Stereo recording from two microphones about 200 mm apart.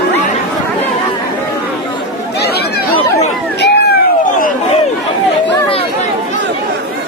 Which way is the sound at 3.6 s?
55° left (ahead or behind).